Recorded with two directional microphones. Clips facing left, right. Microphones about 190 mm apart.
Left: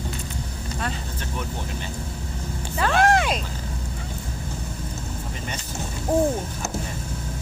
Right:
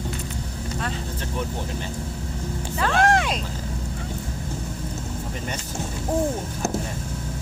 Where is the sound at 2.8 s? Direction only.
5° left (ahead or behind).